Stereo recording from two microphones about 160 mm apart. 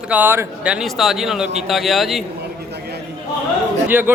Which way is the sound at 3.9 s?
15° right (ahead or behind).